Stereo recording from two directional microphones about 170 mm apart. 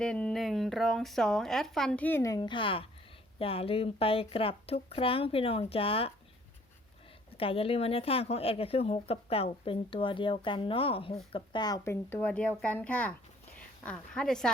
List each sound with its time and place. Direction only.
0.0 s speech: 5° left (ahead or behind)
2.4 s a woman's voice: 30° left (ahead or behind)
7.3 s a woman's voice: 35° left (ahead or behind)
12.1 s speech: 10° left (ahead or behind)